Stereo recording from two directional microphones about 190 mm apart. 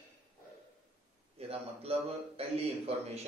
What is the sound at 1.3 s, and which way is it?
Speech, 30° right (ahead or behind).